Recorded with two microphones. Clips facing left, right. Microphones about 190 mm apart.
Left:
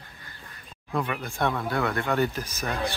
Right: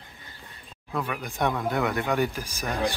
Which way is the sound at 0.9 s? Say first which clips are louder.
Left 2 dB; centre (ahead or behind).